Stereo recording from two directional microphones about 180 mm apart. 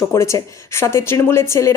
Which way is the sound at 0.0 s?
15° left (ahead or behind).